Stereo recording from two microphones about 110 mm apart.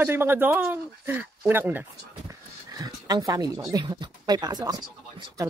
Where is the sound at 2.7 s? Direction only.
35° right (ahead or behind).